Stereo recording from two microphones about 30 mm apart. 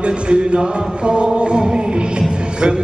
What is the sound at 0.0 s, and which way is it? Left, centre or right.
Music, right.